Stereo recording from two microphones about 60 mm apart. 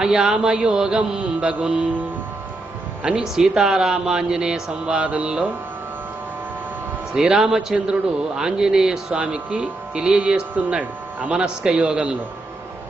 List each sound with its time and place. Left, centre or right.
0.0 s speech: centre
3.0 s speech: centre
5.0 s music: right
7.2 s speech: centre